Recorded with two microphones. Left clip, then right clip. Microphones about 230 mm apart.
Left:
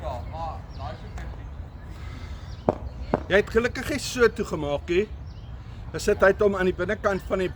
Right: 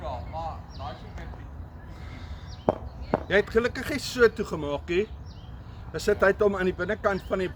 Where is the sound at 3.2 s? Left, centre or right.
Left.